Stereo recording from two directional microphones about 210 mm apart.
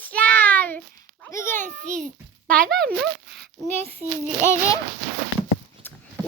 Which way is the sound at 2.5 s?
40° right (ahead or behind).